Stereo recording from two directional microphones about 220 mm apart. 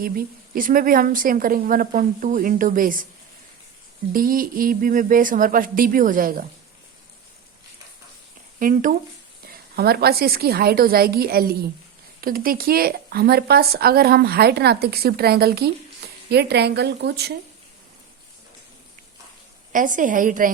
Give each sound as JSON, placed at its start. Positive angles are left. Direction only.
{"t": 0.0, "sound": "a woman's voice", "side_deg": -40}
{"t": 4.1, "sound": "a woman's voice", "side_deg": -40}
{"t": 8.5, "sound": "speech", "side_deg": -40}
{"t": 19.7, "sound": "a woman's voice", "side_deg": -35}